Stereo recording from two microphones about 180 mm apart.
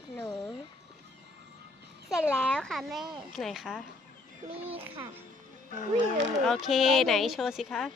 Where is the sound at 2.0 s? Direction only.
Centre (ahead or behind).